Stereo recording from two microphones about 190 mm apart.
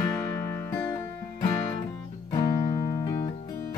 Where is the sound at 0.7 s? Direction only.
15° left (ahead or behind).